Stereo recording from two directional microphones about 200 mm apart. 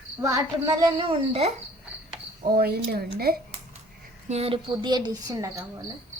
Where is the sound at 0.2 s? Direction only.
15° right (ahead or behind).